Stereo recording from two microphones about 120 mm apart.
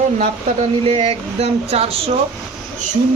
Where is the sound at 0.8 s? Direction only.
55° right (ahead or behind).